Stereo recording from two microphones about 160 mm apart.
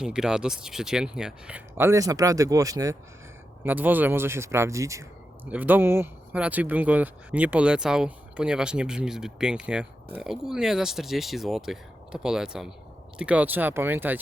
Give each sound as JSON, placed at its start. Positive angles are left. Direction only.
{"t": 0.0, "sound": "speech", "side_deg": -5}
{"t": 1.9, "sound": "speech", "side_deg": -20}
{"t": 3.6, "sound": "speech", "side_deg": -10}